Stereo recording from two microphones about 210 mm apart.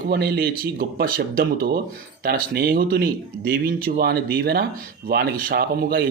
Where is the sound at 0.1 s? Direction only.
50° right (ahead or behind).